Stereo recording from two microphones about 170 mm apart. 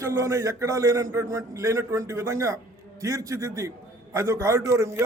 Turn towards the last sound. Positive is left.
turn(degrees=-15)  # may be behind; listen again after turning